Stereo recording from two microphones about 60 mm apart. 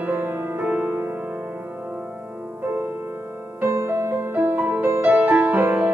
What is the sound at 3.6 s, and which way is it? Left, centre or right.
Music, right.